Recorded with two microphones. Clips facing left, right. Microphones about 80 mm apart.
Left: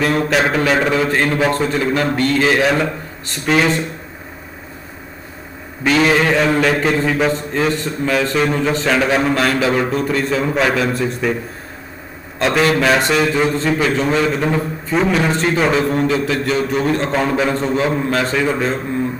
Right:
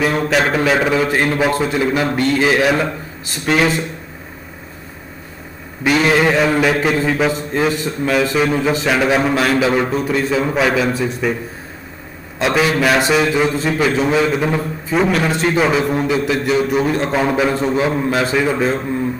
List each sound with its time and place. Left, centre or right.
0.0 s speech: centre
6.0 s speech: centre
12.4 s a man's voice: centre